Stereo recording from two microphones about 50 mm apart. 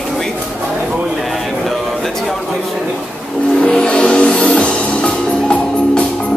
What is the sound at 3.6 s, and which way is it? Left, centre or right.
Music, left.